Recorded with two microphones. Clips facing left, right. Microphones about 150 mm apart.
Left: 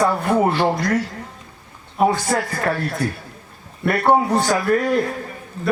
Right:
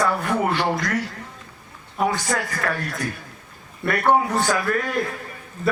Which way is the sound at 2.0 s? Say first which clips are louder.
Left 5 dB; 30° left (ahead or behind).